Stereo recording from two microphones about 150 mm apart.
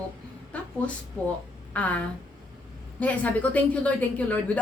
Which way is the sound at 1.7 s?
10° left (ahead or behind).